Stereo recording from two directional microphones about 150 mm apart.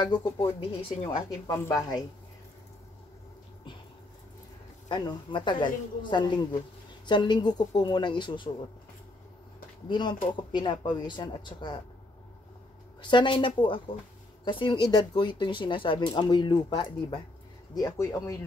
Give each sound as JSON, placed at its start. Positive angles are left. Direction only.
{"t": 0.0, "sound": "speech", "side_deg": 30}
{"t": 1.5, "sound": "speech", "side_deg": 20}
{"t": 4.8, "sound": "speech", "side_deg": 30}
{"t": 9.8, "sound": "speech", "side_deg": 30}
{"t": 13.0, "sound": "speech", "side_deg": 30}